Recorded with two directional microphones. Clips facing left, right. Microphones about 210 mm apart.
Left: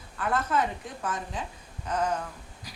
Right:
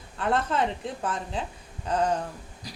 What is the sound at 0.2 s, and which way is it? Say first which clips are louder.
A woman's voice: right 2 dB; 30° right (ahead or behind).